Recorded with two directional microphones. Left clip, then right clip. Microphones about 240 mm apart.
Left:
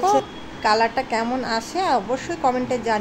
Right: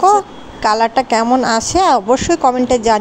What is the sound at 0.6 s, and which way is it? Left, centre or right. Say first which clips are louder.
A woman's voice: right 6 dB; right.